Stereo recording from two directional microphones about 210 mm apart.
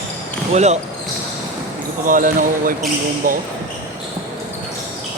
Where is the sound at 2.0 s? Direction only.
40° right (ahead or behind).